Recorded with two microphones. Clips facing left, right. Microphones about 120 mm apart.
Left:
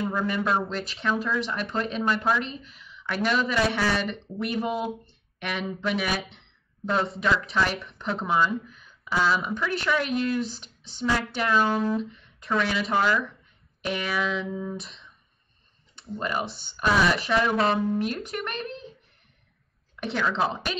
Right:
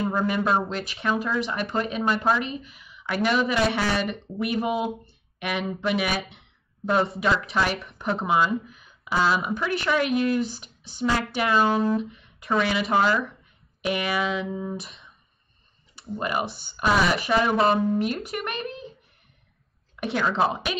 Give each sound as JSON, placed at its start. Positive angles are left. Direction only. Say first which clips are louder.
{"t": 0.4, "sound": "speech", "louder": "right 1 dB", "side_deg": -25}
{"t": 0.7, "sound": "a woman's voice", "louder": "right 1 dB", "side_deg": 0}
{"t": 11.9, "sound": "a sound", "louder": "right 2 dB", "side_deg": -5}
{"t": 12.6, "sound": "speech", "louder": "right 2 dB", "side_deg": -5}
{"t": 14.8, "sound": "a sound", "louder": "right 1 dB", "side_deg": 0}
{"t": 16.2, "sound": "a woman's voice", "louder": "right 2 dB", "side_deg": -5}
{"t": 20.0, "sound": "speech", "louder": "right 3 dB", "side_deg": -10}